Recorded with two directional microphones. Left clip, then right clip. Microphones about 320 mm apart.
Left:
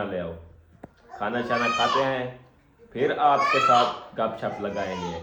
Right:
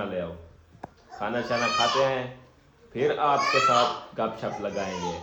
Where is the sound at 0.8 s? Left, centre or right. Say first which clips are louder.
Left 2 dB; centre.